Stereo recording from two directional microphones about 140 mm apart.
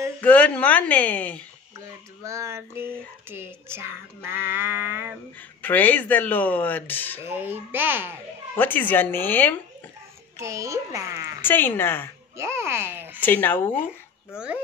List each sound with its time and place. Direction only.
0.2 s speech: 10° left (ahead or behind)
2.2 s a child's voice: 20° right (ahead or behind)
3.3 s a sound: 15° right (ahead or behind)
5.6 s speech: 10° left (ahead or behind)
7.2 s a sound: 15° right (ahead or behind)
8.5 s speech: 15° left (ahead or behind)
10.4 s a child's voice: 20° right (ahead or behind)
11.4 s speech: 15° left (ahead or behind)
12.4 s a sound: 20° right (ahead or behind)
13.2 s speech: 15° left (ahead or behind)